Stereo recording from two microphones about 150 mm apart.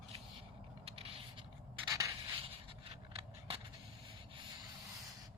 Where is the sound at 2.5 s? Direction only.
40° right (ahead or behind).